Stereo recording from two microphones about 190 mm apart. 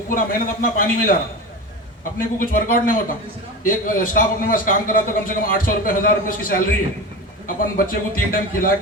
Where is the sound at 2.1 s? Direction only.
45° left (ahead or behind).